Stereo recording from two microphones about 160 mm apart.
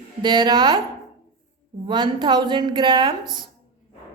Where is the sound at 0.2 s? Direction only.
30° right (ahead or behind).